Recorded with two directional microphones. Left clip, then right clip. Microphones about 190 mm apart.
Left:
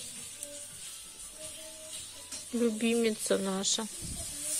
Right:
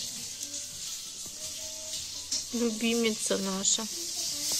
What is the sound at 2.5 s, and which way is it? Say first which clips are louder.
Speech: left 1 dB; 15° left (ahead or behind).